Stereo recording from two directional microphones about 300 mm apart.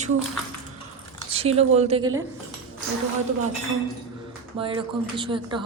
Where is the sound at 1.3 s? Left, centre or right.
Centre.